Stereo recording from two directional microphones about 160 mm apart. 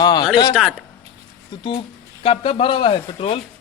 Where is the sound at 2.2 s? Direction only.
35° left (ahead or behind).